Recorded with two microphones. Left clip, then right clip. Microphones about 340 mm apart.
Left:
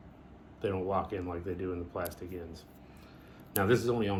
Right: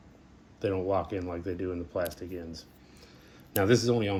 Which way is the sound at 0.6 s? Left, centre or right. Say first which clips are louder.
Right 3 dB; right.